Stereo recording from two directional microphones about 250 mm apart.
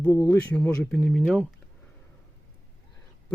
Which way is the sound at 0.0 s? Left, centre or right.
Centre.